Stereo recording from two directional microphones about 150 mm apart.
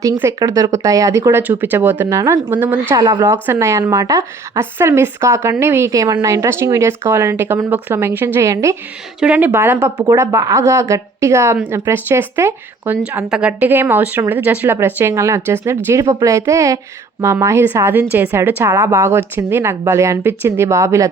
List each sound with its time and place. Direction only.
0.0 s speech: 20° right (ahead or behind)
2.9 s speech: 25° right (ahead or behind)
3.2 s a woman's voice: 15° right (ahead or behind)
11.5 s a woman's voice: 5° right (ahead or behind)
11.9 s a woman's voice: 15° right (ahead or behind)